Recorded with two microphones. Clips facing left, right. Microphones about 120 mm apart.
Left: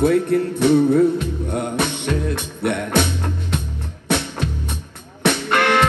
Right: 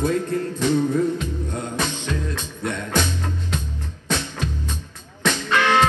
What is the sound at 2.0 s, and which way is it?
Music, 65° left (ahead or behind).